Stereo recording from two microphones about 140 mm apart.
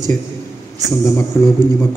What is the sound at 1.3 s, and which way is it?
Speech, 15° left (ahead or behind).